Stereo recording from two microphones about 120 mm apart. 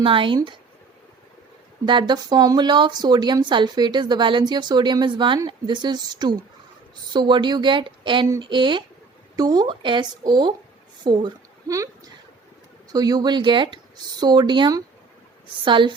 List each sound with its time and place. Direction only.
0.0 s speech: 45° right (ahead or behind)
1.8 s a woman's voice: 40° right (ahead or behind)